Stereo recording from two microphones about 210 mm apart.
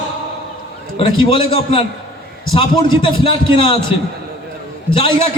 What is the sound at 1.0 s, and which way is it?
A man's voice, 25° left (ahead or behind).